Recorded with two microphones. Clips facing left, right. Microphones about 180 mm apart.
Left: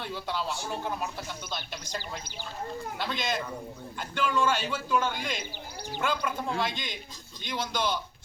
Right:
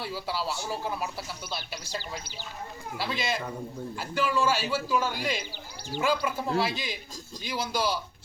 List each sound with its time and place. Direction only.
0.0 s a man's voice: 5° right (ahead or behind)
3.0 s a man's voice: 5° right (ahead or behind)